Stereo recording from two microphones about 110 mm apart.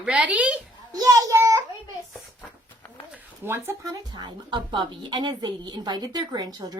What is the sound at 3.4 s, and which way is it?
Speech, 20° right (ahead or behind).